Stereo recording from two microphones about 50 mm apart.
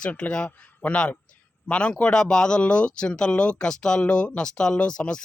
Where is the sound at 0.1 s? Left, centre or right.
Centre.